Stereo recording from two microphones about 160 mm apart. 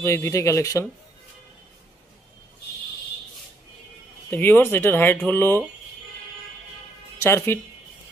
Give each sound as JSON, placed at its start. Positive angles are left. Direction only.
{"t": 0.0, "sound": "speech", "side_deg": 15}
{"t": 4.3, "sound": "speech", "side_deg": 10}
{"t": 7.2, "sound": "speech", "side_deg": 15}